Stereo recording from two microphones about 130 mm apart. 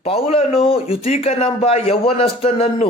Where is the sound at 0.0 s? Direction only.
50° left (ahead or behind).